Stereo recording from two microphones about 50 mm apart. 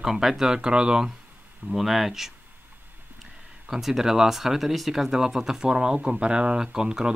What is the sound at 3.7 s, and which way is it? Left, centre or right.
Speech, centre.